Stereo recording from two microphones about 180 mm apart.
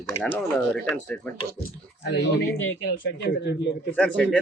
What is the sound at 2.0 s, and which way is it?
Speech, 85° left.